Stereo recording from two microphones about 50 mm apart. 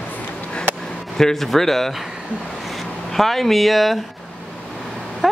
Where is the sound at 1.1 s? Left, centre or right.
Centre.